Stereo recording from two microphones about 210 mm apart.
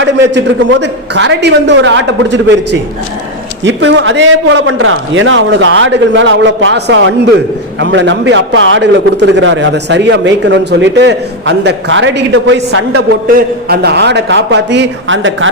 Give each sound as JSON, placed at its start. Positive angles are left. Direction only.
{"t": 0.0, "sound": "a man's voice", "side_deg": -55}
{"t": 3.6, "sound": "a man's voice", "side_deg": -60}
{"t": 13.2, "sound": "a man's voice", "side_deg": -50}